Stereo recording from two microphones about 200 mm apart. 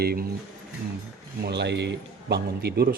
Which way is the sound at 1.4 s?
60° right (ahead or behind).